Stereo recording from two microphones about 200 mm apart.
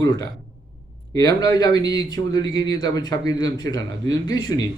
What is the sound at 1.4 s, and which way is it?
Speech, 20° left (ahead or behind).